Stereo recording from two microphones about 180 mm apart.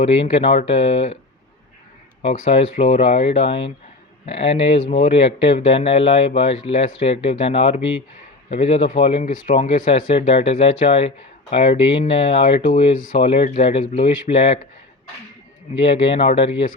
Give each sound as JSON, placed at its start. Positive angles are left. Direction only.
{"t": 0.0, "sound": "speech", "side_deg": 35}
{"t": 2.5, "sound": "speech", "side_deg": 35}
{"t": 15.8, "sound": "speech", "side_deg": 35}